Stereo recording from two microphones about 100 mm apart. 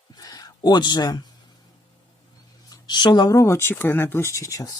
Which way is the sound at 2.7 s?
45° left (ahead or behind).